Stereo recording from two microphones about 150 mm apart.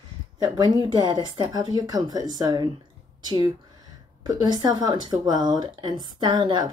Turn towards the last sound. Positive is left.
turn(degrees=-30)  # may be behind; listen again after turning